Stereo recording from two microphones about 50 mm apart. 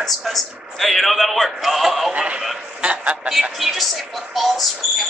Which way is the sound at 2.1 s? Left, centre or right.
Right.